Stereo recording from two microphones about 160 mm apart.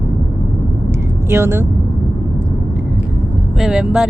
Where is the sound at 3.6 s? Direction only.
5° right (ahead or behind).